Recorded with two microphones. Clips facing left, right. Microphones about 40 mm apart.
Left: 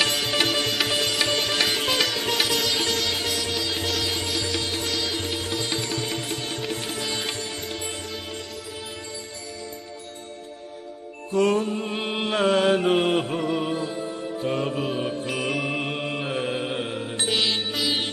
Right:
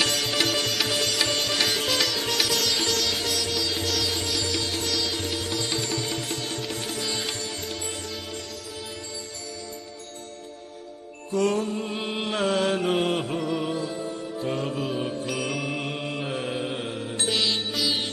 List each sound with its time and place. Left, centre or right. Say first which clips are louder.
0.0 s music: left 2 dB; left
2.5 s sitar: left 1 dB; centre
5.5 s music: left 1 dB; left
11.3 s music: left 3 dB; left